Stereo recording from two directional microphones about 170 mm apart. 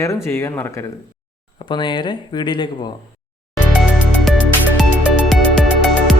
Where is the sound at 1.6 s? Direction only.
30° left (ahead or behind).